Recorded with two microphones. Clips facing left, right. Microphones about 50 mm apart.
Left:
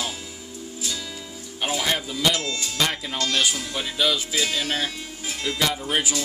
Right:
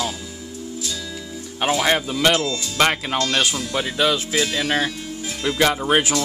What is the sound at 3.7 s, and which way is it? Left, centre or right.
Speech, right.